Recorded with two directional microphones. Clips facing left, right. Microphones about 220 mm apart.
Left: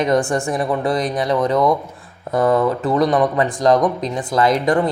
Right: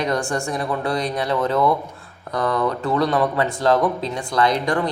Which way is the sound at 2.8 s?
20° left (ahead or behind).